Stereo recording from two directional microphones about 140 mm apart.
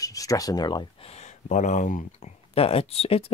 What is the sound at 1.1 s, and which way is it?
Speech, 55° left (ahead or behind).